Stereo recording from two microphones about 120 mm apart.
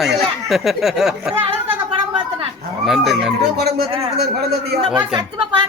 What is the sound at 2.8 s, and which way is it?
Speech, centre (ahead or behind).